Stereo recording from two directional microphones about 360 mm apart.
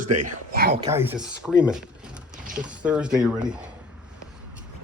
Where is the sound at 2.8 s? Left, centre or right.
Centre.